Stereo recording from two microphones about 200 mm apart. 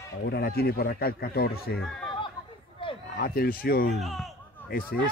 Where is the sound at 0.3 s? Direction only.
50° left (ahead or behind).